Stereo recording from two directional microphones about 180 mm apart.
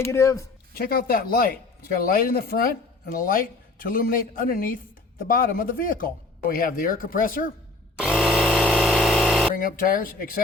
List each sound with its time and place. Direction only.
0.0 s speech: 15° left (ahead or behind)
0.7 s speech: 55° left (ahead or behind)
7.9 s power tool: 5° right (ahead or behind)
9.6 s speech: 50° left (ahead or behind)